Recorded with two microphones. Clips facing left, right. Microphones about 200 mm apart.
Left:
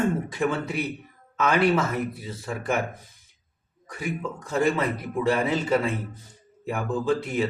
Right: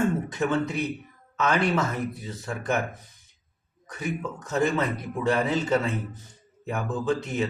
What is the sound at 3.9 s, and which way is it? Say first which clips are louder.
Speech: even; 10° left (ahead or behind).